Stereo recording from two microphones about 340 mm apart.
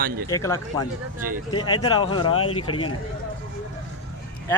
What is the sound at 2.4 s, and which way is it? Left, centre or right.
Speech, left.